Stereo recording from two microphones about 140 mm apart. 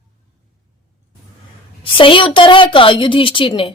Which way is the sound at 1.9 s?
40° left (ahead or behind).